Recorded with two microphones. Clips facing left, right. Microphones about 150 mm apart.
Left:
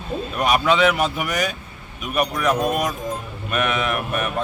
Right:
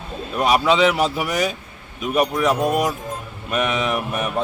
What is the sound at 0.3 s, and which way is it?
A man's voice, 25° right (ahead or behind).